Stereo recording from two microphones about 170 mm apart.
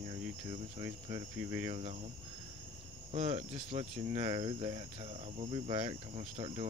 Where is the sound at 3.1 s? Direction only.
40° right (ahead or behind).